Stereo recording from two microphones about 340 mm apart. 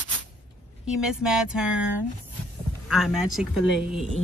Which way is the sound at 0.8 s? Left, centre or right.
Centre.